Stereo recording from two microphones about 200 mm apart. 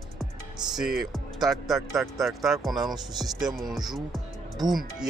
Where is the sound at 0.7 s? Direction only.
Centre (ahead or behind).